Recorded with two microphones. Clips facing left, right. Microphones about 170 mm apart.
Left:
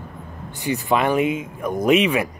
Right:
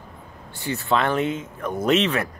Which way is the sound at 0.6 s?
15° left (ahead or behind).